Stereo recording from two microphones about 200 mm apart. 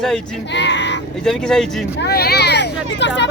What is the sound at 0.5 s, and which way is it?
Speech, 60° left (ahead or behind).